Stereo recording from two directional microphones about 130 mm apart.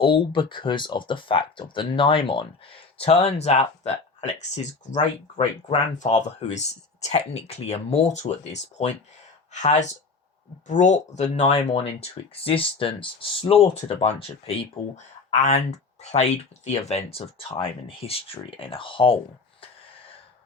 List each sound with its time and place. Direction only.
0.0 s speech: 40° left (ahead or behind); by 5.5 s 65° left (ahead or behind)
6.5 s speech: 60° left (ahead or behind)
9.5 s speech: 65° left (ahead or behind); by 19.2 s 40° left (ahead or behind)